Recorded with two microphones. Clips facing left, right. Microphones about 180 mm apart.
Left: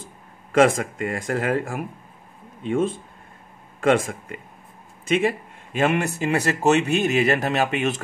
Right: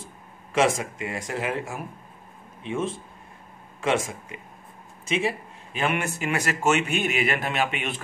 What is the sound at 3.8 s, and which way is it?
Speech, 55° left (ahead or behind).